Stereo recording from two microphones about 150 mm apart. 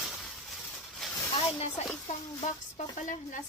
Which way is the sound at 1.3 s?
45° left (ahead or behind).